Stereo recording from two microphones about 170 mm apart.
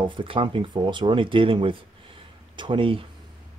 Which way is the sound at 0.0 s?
30° right (ahead or behind).